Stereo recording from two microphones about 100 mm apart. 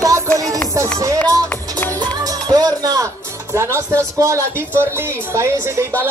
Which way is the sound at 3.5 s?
30° right (ahead or behind).